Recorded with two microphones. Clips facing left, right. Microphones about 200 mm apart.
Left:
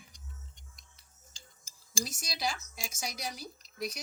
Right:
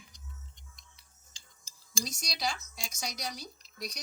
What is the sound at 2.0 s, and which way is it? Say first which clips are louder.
Speech: even; 5° left (ahead or behind).